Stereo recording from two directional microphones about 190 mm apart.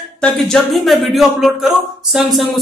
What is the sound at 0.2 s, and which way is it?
Speech, centre (ahead or behind).